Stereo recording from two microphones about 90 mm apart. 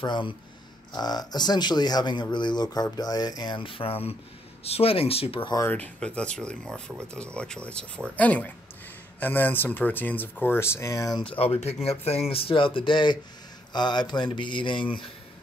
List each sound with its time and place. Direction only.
0.0 s a sound: 60° left (ahead or behind)
0.9 s speech: 50° left (ahead or behind)
3.5 s speech: 75° left (ahead or behind)
5.6 s speech: 20° left (ahead or behind)
11.1 s speech: 85° left; by 13.2 s 60° left (ahead or behind)
13.7 s a sound: 55° left (ahead or behind)